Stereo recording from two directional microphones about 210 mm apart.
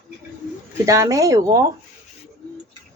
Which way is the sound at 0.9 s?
15° right (ahead or behind).